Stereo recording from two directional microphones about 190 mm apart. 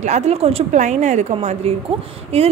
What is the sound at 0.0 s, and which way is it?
A woman's voice, 35° right (ahead or behind).